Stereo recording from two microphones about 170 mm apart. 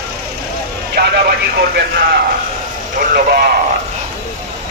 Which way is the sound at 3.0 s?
55° right (ahead or behind).